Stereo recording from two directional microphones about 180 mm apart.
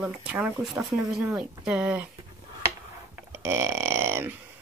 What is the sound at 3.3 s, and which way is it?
A woman's voice, 15° right (ahead or behind).